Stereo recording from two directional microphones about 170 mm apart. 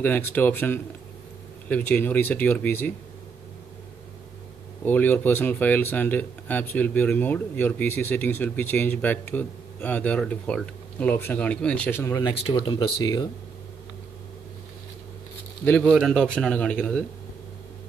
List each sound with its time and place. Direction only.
0.0 s speech: 10° left (ahead or behind)
4.8 s speech: 10° left (ahead or behind)
12.2 s speech: 25° left (ahead or behind)
15.6 s a man's voice: 10° left (ahead or behind)